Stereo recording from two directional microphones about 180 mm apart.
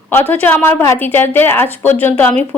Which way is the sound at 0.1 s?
10° left (ahead or behind).